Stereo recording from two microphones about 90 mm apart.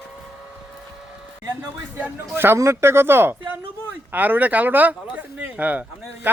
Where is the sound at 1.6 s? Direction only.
20° right (ahead or behind).